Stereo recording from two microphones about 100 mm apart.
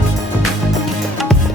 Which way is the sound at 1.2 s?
Centre (ahead or behind).